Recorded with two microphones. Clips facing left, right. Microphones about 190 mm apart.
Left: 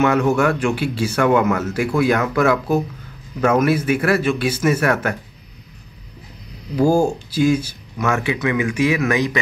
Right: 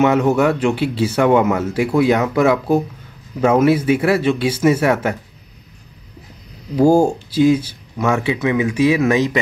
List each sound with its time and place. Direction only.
0.0 s speech: 25° right (ahead or behind)
3.4 s speech: 25° right (ahead or behind)
6.8 s speech: 25° right (ahead or behind)